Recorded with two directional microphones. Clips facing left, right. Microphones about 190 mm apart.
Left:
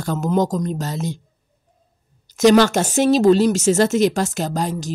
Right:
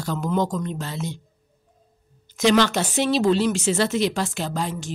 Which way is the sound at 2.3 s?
45° left (ahead or behind).